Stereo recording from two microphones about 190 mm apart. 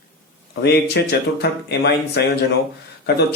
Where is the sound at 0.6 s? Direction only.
55° left (ahead or behind).